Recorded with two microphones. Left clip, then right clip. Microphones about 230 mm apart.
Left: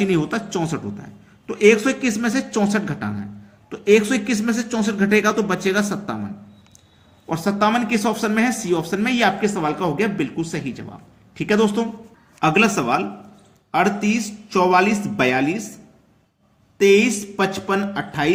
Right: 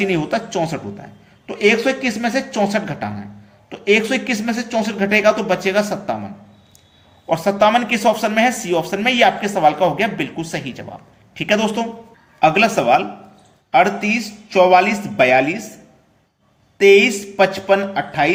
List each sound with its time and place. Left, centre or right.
0.0 s speech: left
7.3 s speech: left
16.7 s speech: left